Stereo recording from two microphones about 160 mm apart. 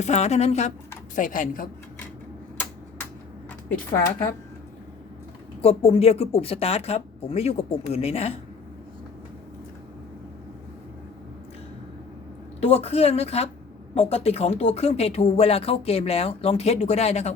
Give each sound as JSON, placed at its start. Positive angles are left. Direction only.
{"t": 0.0, "sound": "speech", "side_deg": 45}
{"t": 1.1, "sound": "speech", "side_deg": 55}
{"t": 5.6, "sound": "speech", "side_deg": 40}
{"t": 12.5, "sound": "speech", "side_deg": 40}